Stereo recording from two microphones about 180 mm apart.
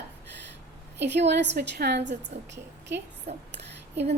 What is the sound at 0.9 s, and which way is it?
A woman's voice, 70° right (ahead or behind).